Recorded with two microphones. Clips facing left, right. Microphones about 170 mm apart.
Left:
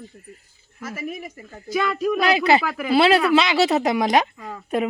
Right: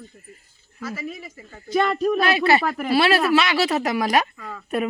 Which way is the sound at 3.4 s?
20° left (ahead or behind).